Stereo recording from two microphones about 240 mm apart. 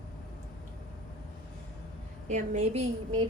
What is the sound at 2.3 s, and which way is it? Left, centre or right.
Speech, right.